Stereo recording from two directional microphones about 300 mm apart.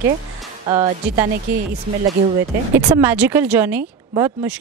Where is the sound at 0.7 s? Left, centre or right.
Centre.